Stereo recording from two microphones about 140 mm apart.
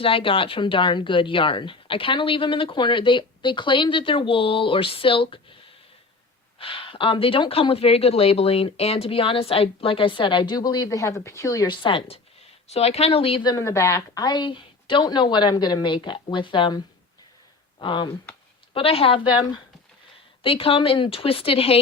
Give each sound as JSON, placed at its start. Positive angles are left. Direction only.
{"t": 0.0, "sound": "speech", "side_deg": 40}
{"t": 6.6, "sound": "speech", "side_deg": 40}
{"t": 13.5, "sound": "speech", "side_deg": 20}
{"t": 20.4, "sound": "speech", "side_deg": 40}